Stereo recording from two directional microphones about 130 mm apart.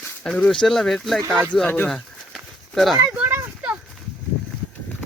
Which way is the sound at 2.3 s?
Centre (ahead or behind).